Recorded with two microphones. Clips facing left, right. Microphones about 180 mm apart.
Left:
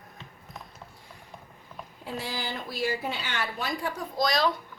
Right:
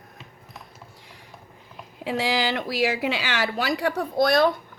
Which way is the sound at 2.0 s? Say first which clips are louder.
Right 10 dB; 90° right.